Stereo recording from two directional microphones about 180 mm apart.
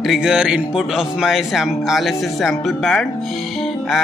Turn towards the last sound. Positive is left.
turn(degrees=0)  # may be behind; listen again after turning